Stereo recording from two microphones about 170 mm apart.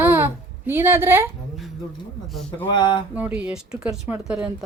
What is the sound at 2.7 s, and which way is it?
Speech, 25° left (ahead or behind).